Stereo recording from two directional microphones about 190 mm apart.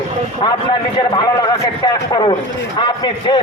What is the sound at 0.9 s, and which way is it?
A man's voice, 20° left (ahead or behind).